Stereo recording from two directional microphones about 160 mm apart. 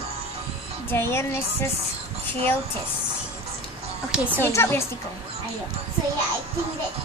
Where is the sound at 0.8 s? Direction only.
15° left (ahead or behind).